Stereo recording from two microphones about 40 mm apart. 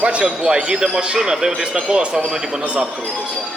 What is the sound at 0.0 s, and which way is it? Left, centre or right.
A man's voice, right.